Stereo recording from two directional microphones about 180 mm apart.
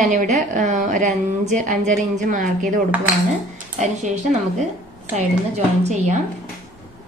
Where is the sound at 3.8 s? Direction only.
40° right (ahead or behind).